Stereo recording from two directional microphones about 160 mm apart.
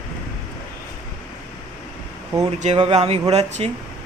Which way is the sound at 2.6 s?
40° right (ahead or behind).